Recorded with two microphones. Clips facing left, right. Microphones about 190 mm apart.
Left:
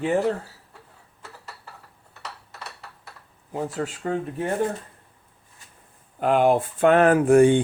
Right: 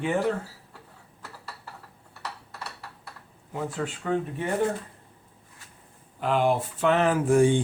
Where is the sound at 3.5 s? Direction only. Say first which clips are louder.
Left 3 dB; 40° left (ahead or behind).